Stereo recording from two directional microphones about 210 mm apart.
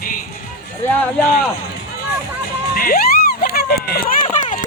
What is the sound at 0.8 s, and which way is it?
Speech, 10° left (ahead or behind).